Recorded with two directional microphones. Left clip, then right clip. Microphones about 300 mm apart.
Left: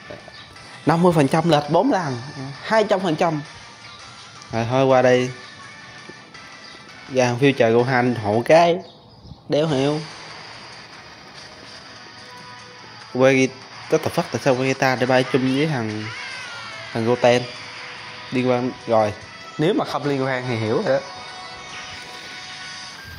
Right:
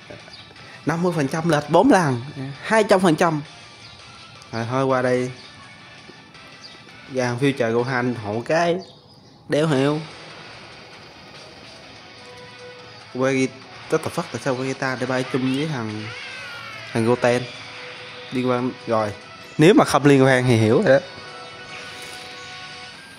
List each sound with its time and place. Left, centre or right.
0.8 s speech: centre
1.7 s a man's voice: centre
4.5 s speech: centre
7.2 s speech: centre
9.5 s speech: centre
13.2 s speech: centre
19.6 s a man's voice: right